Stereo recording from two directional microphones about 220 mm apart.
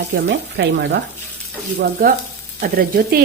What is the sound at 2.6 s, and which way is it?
Speech, 45° right (ahead or behind).